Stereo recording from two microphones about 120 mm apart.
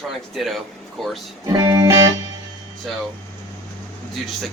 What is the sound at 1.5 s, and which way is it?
Music, 35° right (ahead or behind).